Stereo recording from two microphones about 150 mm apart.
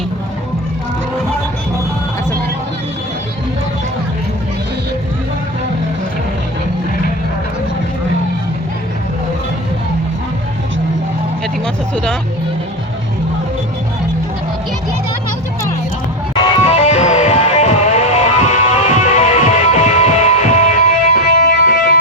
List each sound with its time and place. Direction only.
11.6 s vehicle: 5° left (ahead or behind)
16.6 s music: 45° left (ahead or behind); by 21.9 s 80° left